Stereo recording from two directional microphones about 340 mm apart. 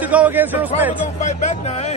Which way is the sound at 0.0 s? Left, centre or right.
Centre.